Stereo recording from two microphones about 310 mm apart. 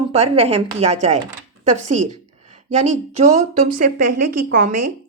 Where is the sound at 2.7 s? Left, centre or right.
Right.